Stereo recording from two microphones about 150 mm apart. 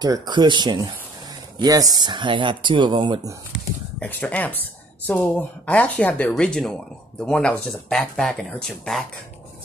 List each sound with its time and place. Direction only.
0.0 s speech: 25° right (ahead or behind)
3.5 s a sound: 10° left (ahead or behind)
5.0 s speech: 10° left (ahead or behind)